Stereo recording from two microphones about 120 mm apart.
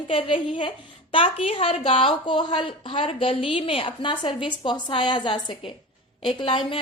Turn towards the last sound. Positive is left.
turn(degrees=45)  # may be behind; listen again after turning